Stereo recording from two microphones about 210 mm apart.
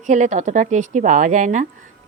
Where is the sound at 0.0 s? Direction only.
35° right (ahead or behind).